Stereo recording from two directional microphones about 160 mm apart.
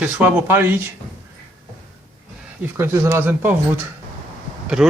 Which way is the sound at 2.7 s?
15° right (ahead or behind).